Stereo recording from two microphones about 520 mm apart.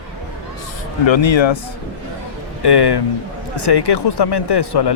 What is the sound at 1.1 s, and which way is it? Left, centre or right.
Speech, left.